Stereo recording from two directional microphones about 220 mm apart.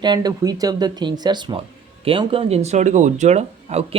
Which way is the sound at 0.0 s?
20° right (ahead or behind).